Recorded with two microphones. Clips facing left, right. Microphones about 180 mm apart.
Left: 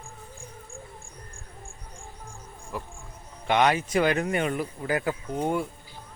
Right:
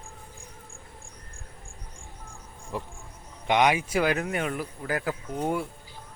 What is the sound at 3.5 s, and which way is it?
Speech, 15° right (ahead or behind).